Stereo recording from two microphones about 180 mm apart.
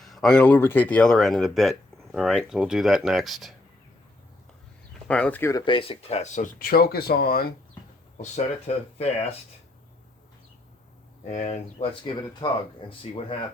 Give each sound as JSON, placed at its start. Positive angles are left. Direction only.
{"t": 0.0, "sound": "speech", "side_deg": 0}
{"t": 5.0, "sound": "speech", "side_deg": 5}
{"t": 8.2, "sound": "speech", "side_deg": 40}
{"t": 11.2, "sound": "speech", "side_deg": 40}